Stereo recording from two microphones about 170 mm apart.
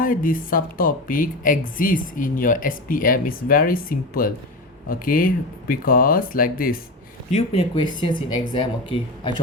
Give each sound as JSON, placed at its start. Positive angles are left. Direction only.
{"t": 0.0, "sound": "a woman's voice", "side_deg": 55}
{"t": 7.3, "sound": "speech", "side_deg": 35}